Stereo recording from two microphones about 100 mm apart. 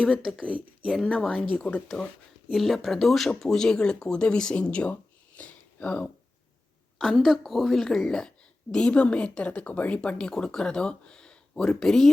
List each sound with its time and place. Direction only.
0.2 s a woman's voice: centre (ahead or behind)
2.5 s speech: centre (ahead or behind)
7.0 s a woman's voice: centre (ahead or behind)